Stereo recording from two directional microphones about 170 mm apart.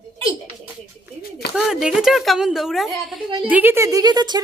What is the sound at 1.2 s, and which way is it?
Speech, 70° left (ahead or behind).